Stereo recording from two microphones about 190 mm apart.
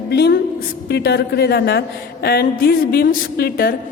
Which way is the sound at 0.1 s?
60° left (ahead or behind).